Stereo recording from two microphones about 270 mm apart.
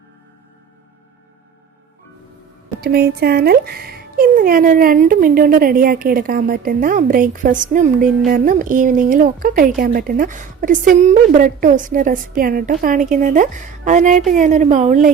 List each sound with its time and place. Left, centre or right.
2.8 s a woman's voice: right